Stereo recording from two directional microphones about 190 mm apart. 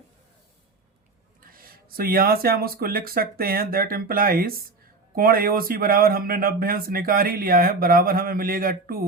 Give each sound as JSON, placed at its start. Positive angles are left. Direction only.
{"t": 1.4, "sound": "speech", "side_deg": -50}